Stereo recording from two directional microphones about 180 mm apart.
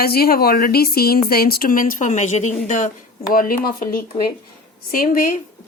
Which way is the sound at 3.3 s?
55° left (ahead or behind).